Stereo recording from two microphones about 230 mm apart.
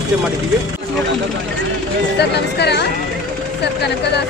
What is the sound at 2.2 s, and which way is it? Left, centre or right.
Speech, left.